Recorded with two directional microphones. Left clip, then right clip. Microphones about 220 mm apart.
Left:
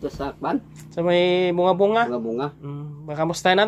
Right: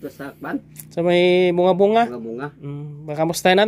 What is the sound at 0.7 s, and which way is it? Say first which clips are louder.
Speech: right 3 dB; 55° right (ahead or behind).